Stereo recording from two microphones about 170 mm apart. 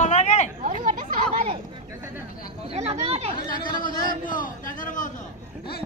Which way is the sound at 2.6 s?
40° right (ahead or behind).